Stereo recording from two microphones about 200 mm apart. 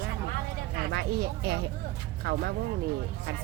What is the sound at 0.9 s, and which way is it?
Speech, 55° right (ahead or behind).